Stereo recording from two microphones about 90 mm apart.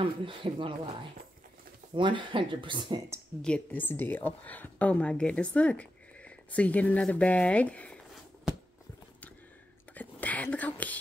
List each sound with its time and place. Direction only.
0.0 s speech: 70° right (ahead or behind)
2.0 s speech: 65° right (ahead or behind)
3.4 s speech: 15° left (ahead or behind)
9.9 s whispering: 15° left (ahead or behind)